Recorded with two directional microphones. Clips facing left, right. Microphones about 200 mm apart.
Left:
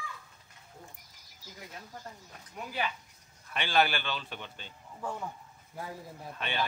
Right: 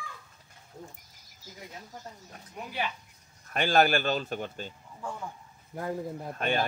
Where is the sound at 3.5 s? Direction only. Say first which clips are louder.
Right 5 dB; 45° right (ahead or behind).